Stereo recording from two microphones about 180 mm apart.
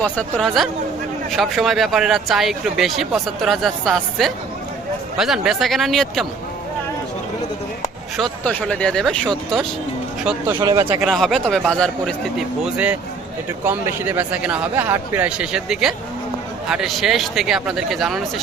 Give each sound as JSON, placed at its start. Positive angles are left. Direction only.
{"t": 0.0, "sound": "speech", "side_deg": 5}
{"t": 8.1, "sound": "speech", "side_deg": 5}
{"t": 10.6, "sound": "speech", "side_deg": -25}
{"t": 10.8, "sound": "speech", "side_deg": 0}